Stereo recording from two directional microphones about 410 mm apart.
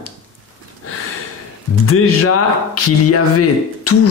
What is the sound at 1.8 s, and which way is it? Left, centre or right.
A man's voice, left.